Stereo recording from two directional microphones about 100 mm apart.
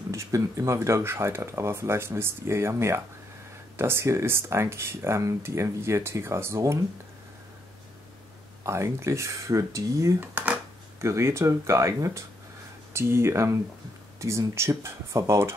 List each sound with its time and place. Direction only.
0.1 s speech: 35° right (ahead or behind)
8.6 s speech: 30° right (ahead or behind)
10.2 s speech: 15° right (ahead or behind)
11.0 s speech: 30° right (ahead or behind)